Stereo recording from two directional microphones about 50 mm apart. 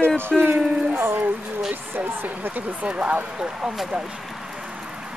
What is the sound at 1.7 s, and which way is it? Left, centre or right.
Speech, right.